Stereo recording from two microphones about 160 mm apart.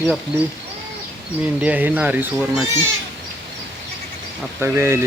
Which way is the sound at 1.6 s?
10° right (ahead or behind).